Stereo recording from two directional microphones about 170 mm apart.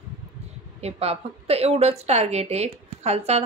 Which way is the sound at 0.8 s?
35° right (ahead or behind).